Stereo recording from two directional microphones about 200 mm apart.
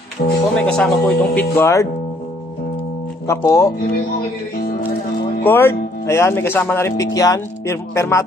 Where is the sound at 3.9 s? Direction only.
50° left (ahead or behind).